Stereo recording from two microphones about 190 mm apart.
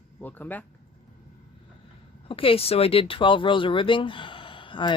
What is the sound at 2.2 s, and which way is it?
Speech, 30° left (ahead or behind).